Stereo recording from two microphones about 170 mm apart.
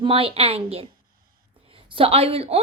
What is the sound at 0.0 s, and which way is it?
A woman's voice, 30° right (ahead or behind).